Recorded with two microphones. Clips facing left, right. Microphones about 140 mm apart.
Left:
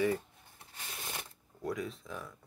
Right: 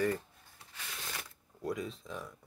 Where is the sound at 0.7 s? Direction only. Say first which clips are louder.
Left 1 dB; 30° left (ahead or behind).